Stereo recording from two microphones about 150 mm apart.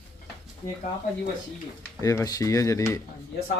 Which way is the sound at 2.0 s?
20° left (ahead or behind).